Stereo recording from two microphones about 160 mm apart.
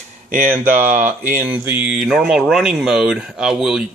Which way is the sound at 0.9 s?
50° right (ahead or behind).